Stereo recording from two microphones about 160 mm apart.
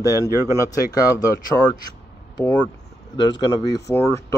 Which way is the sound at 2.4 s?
10° left (ahead or behind).